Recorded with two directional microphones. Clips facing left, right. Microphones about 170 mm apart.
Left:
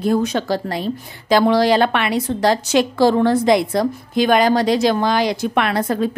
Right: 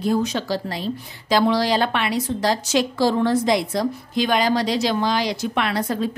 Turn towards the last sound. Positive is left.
turn(degrees=55)  # may be behind; listen again after turning